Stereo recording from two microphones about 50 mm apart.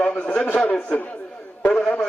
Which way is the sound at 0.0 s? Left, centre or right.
Centre.